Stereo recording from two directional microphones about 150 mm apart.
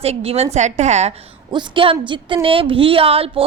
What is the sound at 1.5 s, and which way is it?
A woman's voice, 30° right (ahead or behind).